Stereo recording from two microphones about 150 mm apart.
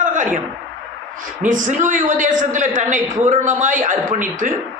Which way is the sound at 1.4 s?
60° right (ahead or behind).